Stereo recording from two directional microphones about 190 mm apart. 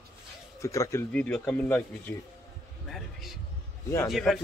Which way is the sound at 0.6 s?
15° left (ahead or behind).